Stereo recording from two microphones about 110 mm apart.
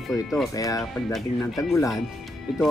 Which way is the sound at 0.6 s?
35° left (ahead or behind).